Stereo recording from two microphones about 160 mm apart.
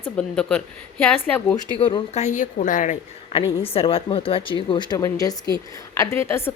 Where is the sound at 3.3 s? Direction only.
35° left (ahead or behind).